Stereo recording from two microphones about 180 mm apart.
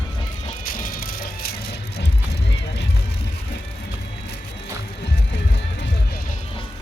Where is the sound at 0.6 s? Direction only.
50° left (ahead or behind); by 2.8 s 75° left (ahead or behind).